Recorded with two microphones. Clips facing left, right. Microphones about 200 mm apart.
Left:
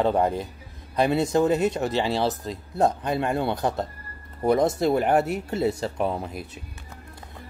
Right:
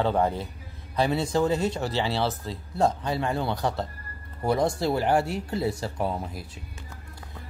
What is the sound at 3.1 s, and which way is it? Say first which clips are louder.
Speech: left 3 dB; 50° left (ahead or behind).